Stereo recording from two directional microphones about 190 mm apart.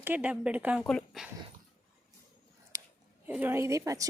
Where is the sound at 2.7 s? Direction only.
15° right (ahead or behind).